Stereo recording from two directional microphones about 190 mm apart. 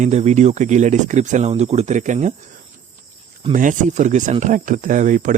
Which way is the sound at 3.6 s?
40° right (ahead or behind).